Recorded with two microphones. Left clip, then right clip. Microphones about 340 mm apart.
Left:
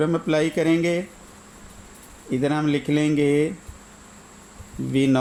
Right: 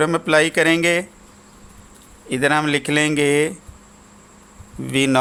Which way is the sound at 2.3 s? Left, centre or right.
Right.